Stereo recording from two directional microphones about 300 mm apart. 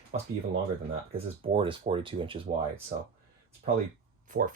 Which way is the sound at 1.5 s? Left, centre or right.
Centre.